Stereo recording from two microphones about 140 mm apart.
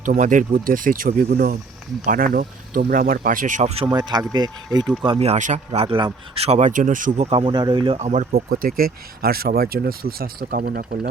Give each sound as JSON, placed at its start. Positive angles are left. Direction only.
{"t": 0.0, "sound": "speech", "side_deg": -70}
{"t": 3.8, "sound": "speech", "side_deg": -30}
{"t": 5.0, "sound": "a man's voice", "side_deg": -45}
{"t": 7.3, "sound": "speech", "side_deg": -40}
{"t": 7.9, "sound": "speech", "side_deg": -55}